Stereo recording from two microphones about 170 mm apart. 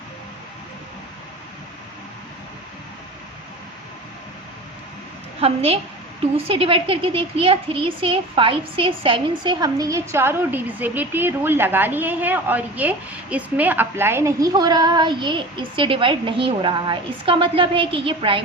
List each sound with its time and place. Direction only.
5.4 s a woman's voice: 35° right (ahead or behind)